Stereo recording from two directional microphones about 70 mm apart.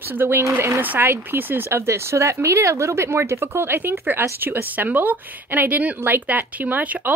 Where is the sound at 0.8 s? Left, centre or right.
Right.